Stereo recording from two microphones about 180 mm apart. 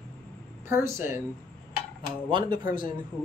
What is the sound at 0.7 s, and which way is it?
Speech, 15° right (ahead or behind).